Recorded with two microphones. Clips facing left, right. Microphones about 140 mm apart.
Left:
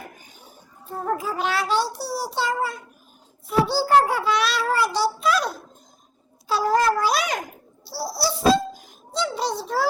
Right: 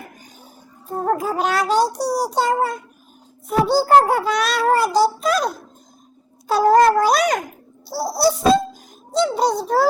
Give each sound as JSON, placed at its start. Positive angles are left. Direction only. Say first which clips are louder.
{"t": 0.9, "sound": "child singing", "louder": "right 5 dB", "side_deg": -45}
{"t": 6.5, "sound": "child singing", "louder": "right 7 dB", "side_deg": -50}
{"t": 9.1, "sound": "a child's voice", "louder": "right 7 dB", "side_deg": -40}